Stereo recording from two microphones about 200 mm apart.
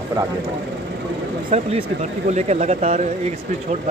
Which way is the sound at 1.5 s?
30° right (ahead or behind).